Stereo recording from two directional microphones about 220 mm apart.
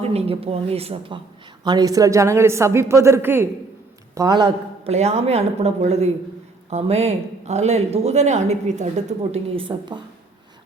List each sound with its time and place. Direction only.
0.0 s a woman's voice: 30° right (ahead or behind)